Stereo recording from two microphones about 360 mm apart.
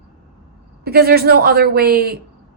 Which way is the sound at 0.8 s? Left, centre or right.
Right.